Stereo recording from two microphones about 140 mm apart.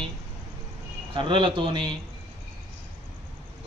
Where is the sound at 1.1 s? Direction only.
35° right (ahead or behind).